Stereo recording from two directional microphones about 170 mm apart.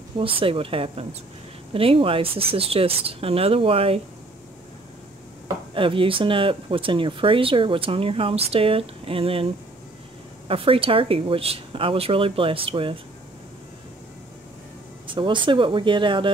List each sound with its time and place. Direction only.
0.2 s speech: 30° right (ahead or behind)
5.8 s speech: 30° right (ahead or behind)
10.5 s speech: 35° right (ahead or behind)
15.0 s speech: 30° right (ahead or behind)